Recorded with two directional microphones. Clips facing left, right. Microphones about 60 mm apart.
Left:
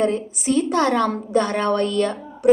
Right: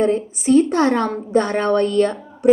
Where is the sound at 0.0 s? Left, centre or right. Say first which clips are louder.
Right 3 dB; right.